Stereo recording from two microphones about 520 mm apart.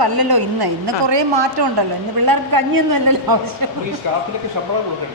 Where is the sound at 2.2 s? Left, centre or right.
Right.